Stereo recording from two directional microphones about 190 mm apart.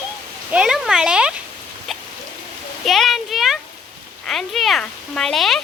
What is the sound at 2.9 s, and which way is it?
A child's voice, centre (ahead or behind).